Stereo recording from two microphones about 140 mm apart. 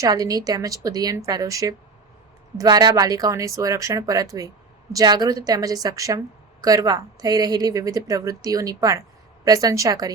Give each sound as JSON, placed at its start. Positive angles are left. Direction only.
{"t": 0.0, "sound": "a woman's voice", "side_deg": -25}